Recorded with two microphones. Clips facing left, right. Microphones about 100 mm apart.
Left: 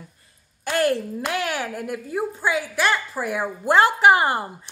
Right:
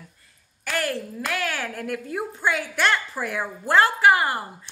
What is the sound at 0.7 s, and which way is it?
A woman's voice, 25° left (ahead or behind).